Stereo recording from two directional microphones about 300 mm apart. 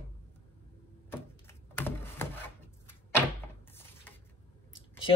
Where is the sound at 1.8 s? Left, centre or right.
Centre.